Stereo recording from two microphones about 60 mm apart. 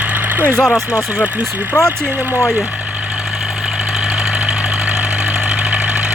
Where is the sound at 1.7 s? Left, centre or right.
Centre.